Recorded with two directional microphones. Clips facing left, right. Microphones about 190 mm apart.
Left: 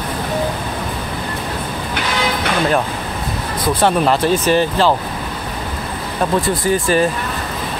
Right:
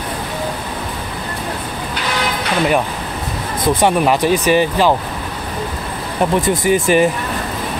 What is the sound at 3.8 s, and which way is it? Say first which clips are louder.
Speech: even; 15° right (ahead or behind).